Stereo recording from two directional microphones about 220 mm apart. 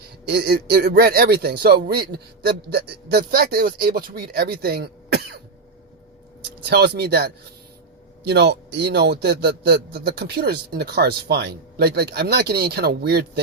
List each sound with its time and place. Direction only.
0.3 s a man's voice: 45° right (ahead or behind)
6.7 s a man's voice: 50° right (ahead or behind)